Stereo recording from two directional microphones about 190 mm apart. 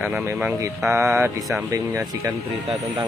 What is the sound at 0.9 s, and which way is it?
Speech, 15° right (ahead or behind).